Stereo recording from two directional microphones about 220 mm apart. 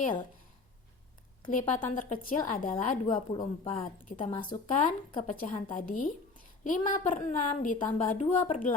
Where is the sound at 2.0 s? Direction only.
40° left (ahead or behind).